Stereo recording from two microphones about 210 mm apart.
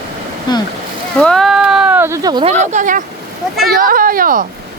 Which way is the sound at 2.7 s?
40° right (ahead or behind).